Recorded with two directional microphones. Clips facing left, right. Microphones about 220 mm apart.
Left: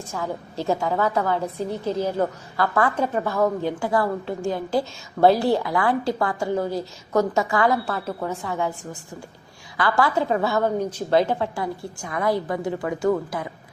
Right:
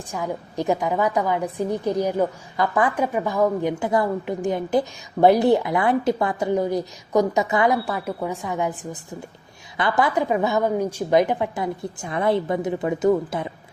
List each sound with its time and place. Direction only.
0.1 s a woman's voice: 15° right (ahead or behind)